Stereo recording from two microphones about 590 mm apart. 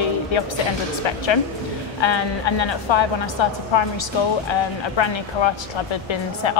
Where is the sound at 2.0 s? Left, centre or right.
Left.